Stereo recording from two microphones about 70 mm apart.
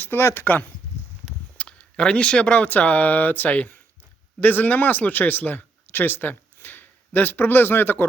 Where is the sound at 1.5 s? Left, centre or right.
Centre.